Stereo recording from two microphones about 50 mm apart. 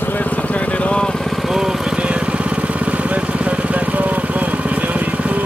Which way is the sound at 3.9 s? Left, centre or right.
Right.